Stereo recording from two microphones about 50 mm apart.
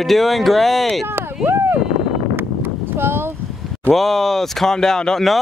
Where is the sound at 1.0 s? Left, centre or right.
Right.